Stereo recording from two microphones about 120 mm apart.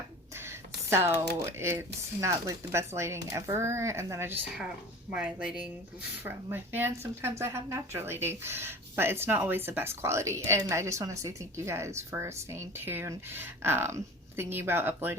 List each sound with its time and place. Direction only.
0.9 s speech: 25° right (ahead or behind)